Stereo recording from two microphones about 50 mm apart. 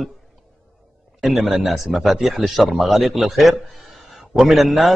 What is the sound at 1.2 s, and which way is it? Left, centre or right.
Speech, centre.